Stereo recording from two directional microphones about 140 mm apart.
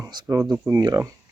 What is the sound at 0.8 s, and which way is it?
Speech, 25° right (ahead or behind).